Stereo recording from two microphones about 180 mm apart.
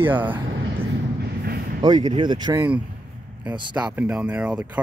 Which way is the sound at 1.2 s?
60° right (ahead or behind).